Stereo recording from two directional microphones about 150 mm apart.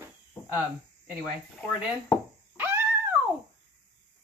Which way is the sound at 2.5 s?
15° right (ahead or behind).